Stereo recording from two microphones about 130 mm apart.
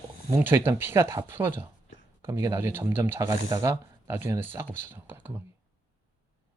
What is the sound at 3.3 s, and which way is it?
Speech, 35° right (ahead or behind).